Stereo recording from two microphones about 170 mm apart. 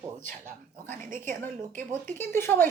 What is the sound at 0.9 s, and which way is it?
Speech, 50° right (ahead or behind).